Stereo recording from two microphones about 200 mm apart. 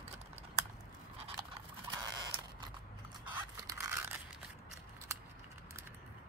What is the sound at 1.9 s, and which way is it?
Mechanisms, 20° right (ahead or behind).